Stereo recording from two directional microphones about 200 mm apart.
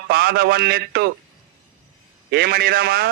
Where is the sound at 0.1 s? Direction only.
50° right (ahead or behind).